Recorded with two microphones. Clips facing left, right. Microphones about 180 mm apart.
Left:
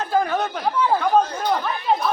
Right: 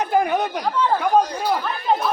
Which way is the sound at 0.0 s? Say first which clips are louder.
Right 2 dB; 15° right (ahead or behind).